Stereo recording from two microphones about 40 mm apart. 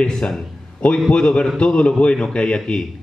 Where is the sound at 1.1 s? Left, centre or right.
Left.